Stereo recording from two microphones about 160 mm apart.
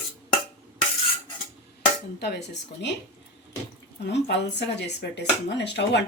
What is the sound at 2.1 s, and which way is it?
Speech, 90° left.